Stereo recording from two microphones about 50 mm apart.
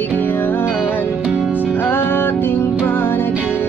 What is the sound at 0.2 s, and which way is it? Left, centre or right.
Music, left.